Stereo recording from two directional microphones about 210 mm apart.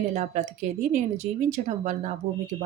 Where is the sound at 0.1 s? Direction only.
35° right (ahead or behind).